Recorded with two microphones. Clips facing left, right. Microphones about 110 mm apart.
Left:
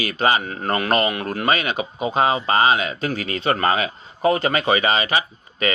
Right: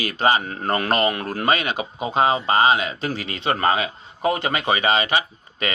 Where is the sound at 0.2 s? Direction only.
30° right (ahead or behind).